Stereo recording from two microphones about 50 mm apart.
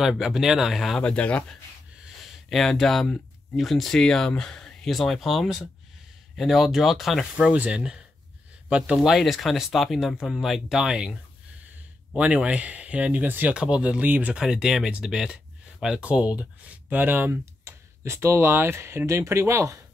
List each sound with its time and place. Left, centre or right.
0.2 s speech: centre
1.0 s speech: left
2.2 s speech: centre
7.5 s speech: right
9.1 s speech: centre
12.2 s speech: right
13.6 s speech: right
14.3 s speech: centre
17.0 s speech: right
17.6 s speech: right